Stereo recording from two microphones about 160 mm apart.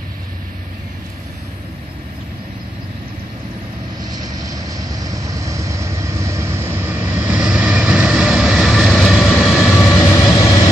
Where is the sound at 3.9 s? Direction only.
25° right (ahead or behind); by 9.6 s centre (ahead or behind).